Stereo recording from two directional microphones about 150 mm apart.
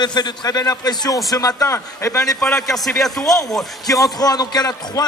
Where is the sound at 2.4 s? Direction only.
5° left (ahead or behind).